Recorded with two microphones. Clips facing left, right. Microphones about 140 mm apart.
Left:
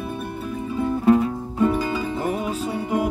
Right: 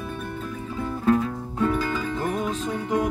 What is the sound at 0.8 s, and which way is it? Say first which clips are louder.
Music: left 4 dB; 15° left (ahead or behind).